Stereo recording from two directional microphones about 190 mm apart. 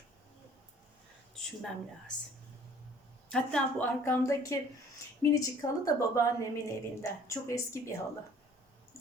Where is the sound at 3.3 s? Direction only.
5° left (ahead or behind).